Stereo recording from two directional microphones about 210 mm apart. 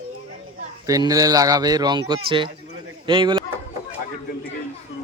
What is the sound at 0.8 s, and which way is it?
Speech, 15° right (ahead or behind).